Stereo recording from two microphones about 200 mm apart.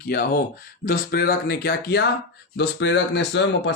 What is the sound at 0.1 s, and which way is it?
Speech, 50° left (ahead or behind).